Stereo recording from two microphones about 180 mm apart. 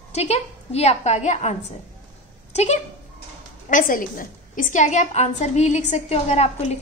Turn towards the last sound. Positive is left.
turn(degrees=35)  # may be behind; listen again after turning